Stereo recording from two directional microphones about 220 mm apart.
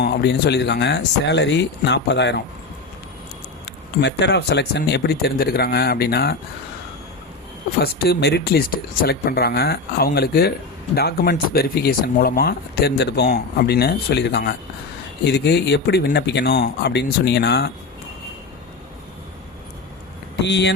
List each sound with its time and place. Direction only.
0.0 s speech: 50° left (ahead or behind)
3.7 s speech: 50° left (ahead or behind)
7.8 s speech: 45° left (ahead or behind)
20.4 s speech: 50° left (ahead or behind)